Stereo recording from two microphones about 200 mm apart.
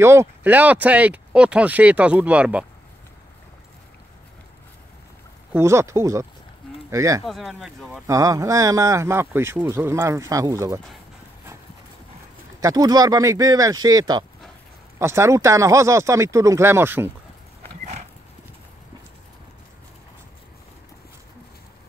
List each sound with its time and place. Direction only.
0.0 s speech: 15° right (ahead or behind)
5.5 s speech: 15° right (ahead or behind)
7.2 s speech: centre (ahead or behind)
8.1 s speech: 15° right (ahead or behind)
12.5 s speech: 20° right (ahead or behind)